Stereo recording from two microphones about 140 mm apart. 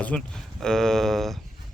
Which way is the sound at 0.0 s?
5° left (ahead or behind).